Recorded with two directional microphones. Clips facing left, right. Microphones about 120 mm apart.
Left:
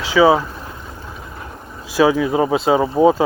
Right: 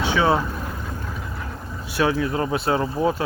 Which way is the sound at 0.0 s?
90° left.